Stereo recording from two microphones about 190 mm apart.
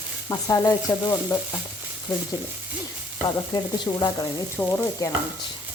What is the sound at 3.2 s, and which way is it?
Speech, 20° left (ahead or behind).